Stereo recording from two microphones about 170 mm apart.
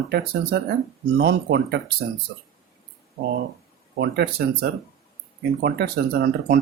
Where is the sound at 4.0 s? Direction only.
75° right (ahead or behind).